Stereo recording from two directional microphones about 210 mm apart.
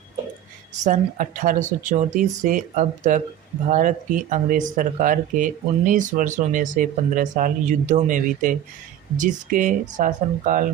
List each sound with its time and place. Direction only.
0.9 s speech: 40° right (ahead or behind)